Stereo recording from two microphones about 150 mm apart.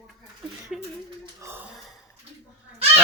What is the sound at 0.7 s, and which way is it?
Speech, 5° right (ahead or behind).